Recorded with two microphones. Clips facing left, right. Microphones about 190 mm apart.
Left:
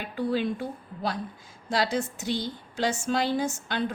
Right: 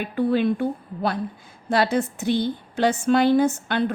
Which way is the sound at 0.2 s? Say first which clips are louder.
Right 7 dB; 60° right (ahead or behind).